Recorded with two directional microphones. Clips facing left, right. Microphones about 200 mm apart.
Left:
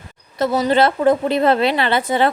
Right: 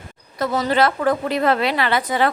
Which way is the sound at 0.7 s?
25° left (ahead or behind).